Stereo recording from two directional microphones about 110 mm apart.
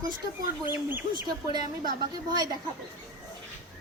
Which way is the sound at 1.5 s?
40° right (ahead or behind).